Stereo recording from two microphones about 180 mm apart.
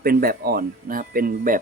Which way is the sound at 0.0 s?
55° right (ahead or behind).